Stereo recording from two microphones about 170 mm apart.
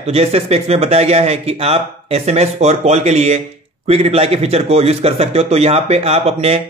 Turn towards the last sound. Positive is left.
turn(degrees=-35)  # may be behind; listen again after turning